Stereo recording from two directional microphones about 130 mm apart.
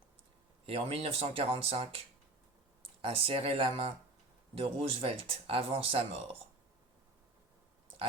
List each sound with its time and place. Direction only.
0.6 s speech: 50° right (ahead or behind)
3.0 s speech: 45° right (ahead or behind)